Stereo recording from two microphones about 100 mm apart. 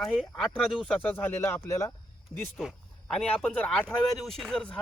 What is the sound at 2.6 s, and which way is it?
Speech, centre (ahead or behind).